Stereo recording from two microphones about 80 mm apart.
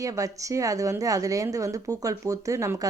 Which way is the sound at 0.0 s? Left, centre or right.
Right.